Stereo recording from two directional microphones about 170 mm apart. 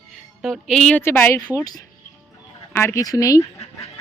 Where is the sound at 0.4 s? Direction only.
5° left (ahead or behind); by 1.7 s 20° left (ahead or behind).